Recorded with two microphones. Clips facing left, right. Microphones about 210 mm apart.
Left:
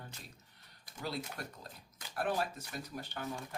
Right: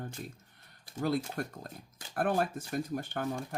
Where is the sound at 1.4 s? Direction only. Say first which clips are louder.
Right 8 dB; 50° right (ahead or behind).